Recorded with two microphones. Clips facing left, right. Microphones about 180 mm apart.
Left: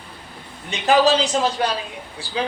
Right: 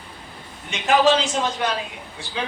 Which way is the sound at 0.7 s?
35° left (ahead or behind).